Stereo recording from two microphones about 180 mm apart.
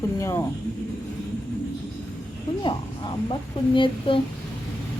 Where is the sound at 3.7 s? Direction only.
30° left (ahead or behind).